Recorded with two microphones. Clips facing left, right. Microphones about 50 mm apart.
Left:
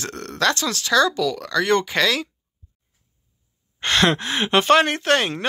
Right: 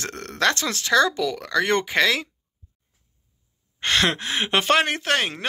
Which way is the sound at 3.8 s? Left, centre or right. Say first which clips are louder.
Left 3 dB; centre.